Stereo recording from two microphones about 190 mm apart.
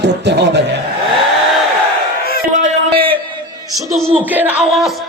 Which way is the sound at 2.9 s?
30° right (ahead or behind).